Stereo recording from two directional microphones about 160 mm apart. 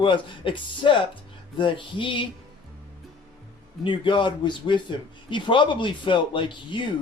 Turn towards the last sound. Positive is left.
turn(degrees=30)  # may be behind; listen again after turning